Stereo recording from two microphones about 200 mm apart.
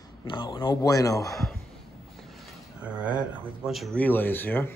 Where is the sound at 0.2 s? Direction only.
25° left (ahead or behind).